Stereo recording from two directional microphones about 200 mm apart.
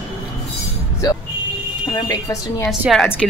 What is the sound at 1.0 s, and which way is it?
Speech, 20° left (ahead or behind).